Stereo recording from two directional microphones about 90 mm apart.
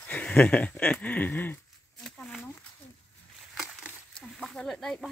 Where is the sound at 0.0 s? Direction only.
20° left (ahead or behind).